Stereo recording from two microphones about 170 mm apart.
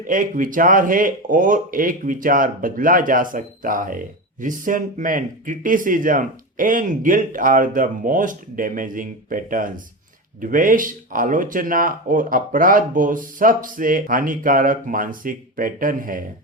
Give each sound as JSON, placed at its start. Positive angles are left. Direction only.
{"t": 0.1, "sound": "speech", "side_deg": -50}